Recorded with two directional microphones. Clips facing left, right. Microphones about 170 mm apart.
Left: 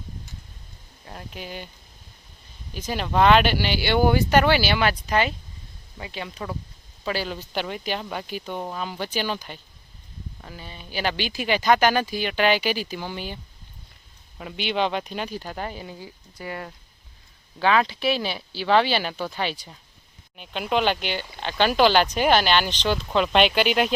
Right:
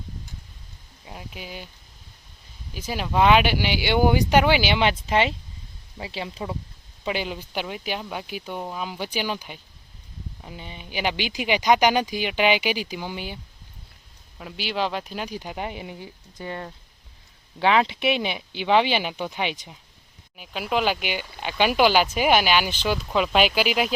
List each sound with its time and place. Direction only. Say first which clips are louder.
1.0 s speech: left 1 dB; 5° right (ahead or behind)
2.7 s speech: left 1 dB; 10° right (ahead or behind)
20.3 s speech: left 1 dB; 5° right (ahead or behind)